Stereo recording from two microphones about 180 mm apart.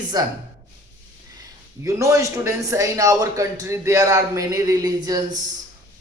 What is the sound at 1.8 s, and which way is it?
A man's voice, 15° right (ahead or behind).